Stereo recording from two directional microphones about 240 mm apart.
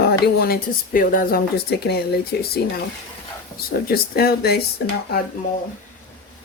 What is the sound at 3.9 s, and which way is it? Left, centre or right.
Speech, left.